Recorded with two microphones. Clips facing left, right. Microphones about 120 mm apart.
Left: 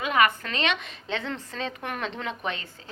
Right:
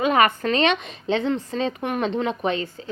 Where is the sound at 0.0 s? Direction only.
35° right (ahead or behind).